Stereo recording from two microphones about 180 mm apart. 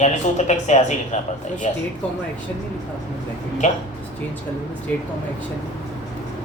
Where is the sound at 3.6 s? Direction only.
40° left (ahead or behind).